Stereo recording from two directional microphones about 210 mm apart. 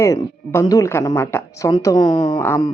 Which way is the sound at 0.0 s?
15° left (ahead or behind).